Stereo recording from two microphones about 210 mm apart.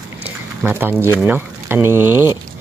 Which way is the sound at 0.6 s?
10° right (ahead or behind).